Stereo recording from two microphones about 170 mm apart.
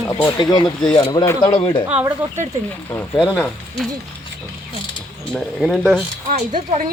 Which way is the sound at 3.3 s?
10° left (ahead or behind).